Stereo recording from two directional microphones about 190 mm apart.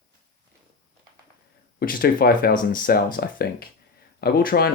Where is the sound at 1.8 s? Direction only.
50° left (ahead or behind).